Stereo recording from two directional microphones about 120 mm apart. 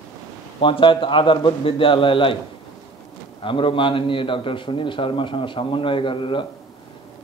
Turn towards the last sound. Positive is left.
turn(degrees=45)  # may be behind; listen again after turning